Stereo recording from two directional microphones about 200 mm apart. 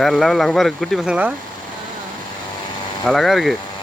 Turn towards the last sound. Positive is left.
turn(degrees=0)  # may be behind; listen again after turning